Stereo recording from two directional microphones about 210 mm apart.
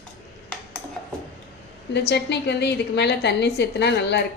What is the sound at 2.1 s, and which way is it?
A woman's voice, 55° left (ahead or behind).